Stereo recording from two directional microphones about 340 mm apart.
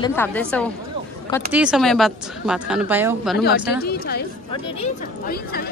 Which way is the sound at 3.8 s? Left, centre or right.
Left.